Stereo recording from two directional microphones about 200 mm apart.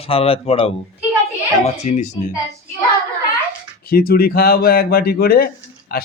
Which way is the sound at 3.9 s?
50° left (ahead or behind).